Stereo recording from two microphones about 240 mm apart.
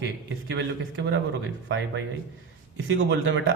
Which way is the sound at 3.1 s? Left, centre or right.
Right.